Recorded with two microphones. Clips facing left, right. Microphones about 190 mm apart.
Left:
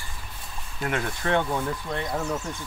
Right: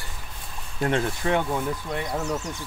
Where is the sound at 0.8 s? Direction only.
30° right (ahead or behind).